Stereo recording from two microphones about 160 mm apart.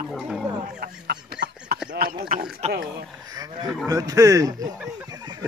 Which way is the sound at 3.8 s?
20° right (ahead or behind).